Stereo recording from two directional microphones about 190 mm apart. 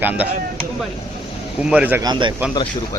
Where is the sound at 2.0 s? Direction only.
25° right (ahead or behind).